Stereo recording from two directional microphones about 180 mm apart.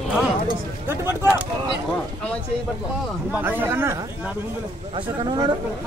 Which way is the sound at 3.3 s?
10° right (ahead or behind).